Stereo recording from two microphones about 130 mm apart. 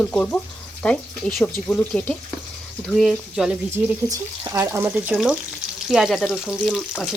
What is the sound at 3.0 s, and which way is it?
Frying, centre (ahead or behind).